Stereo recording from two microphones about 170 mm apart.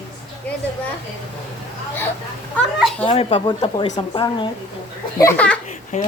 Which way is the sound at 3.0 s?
30° left (ahead or behind).